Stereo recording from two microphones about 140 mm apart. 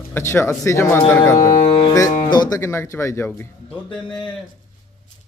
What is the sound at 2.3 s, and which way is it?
Speech, 30° left (ahead or behind).